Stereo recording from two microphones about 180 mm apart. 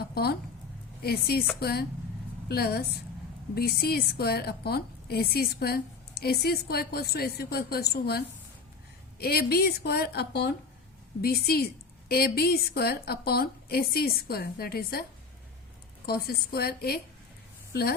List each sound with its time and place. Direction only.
0.1 s a woman's voice: 60° left (ahead or behind)
16.0 s a woman's voice: 60° left (ahead or behind)